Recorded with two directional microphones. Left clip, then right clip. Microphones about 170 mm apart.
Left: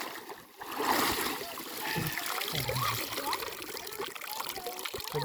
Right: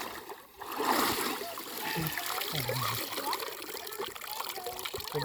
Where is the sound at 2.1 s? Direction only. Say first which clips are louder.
Even; 15° right (ahead or behind).